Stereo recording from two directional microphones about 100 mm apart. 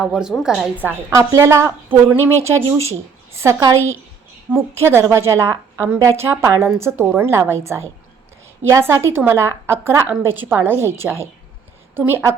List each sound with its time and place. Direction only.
0.0 s a woman's voice: 5° right (ahead or behind)
0.8 s a woman's voice: 20° right (ahead or behind)
1.1 s a woman's voice: 30° right (ahead or behind)